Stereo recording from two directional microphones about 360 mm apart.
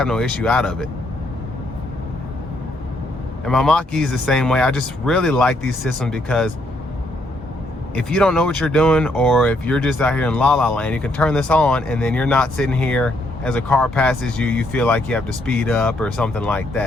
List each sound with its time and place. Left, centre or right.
0.0 s speech: centre
3.4 s speech: centre
7.9 s speech: centre